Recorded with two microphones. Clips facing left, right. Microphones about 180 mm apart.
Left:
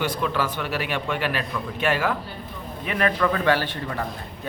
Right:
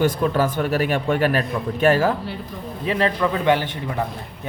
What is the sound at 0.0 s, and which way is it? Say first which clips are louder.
A man's voice: right 6 dB; 45° right (ahead or behind).